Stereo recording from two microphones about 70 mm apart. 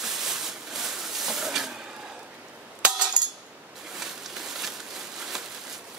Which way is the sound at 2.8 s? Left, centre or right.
Centre.